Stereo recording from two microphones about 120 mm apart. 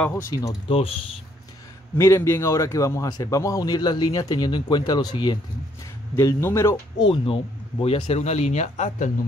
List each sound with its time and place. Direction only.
0.0 s speech: 20° left (ahead or behind)
2.0 s speech: 20° left (ahead or behind); by 5.4 s 40° left (ahead or behind)
6.1 s speech: 20° left (ahead or behind)
7.0 s speech: 45° left (ahead or behind)
7.8 s speech: 55° left (ahead or behind)